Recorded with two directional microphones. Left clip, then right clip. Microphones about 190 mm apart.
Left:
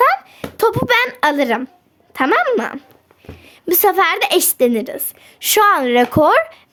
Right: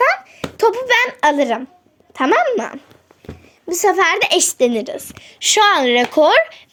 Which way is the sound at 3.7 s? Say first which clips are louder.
Left 1 dB; 35° left (ahead or behind).